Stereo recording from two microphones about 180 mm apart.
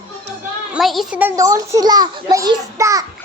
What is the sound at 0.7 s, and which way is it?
A child's voice, centre (ahead or behind).